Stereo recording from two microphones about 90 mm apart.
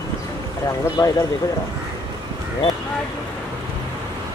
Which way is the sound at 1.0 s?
45° left (ahead or behind).